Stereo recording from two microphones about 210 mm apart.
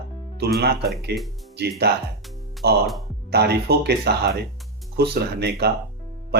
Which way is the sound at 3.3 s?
50° right (ahead or behind).